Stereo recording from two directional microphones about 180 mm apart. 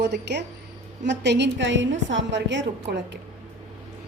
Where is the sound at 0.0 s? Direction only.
70° right (ahead or behind).